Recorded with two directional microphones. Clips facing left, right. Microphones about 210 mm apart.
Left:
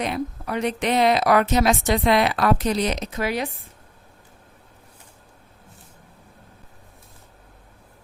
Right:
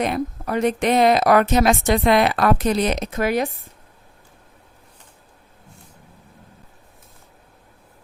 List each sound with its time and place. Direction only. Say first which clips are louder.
0.0 s a woman's voice: right 3 dB; 50° right (ahead or behind)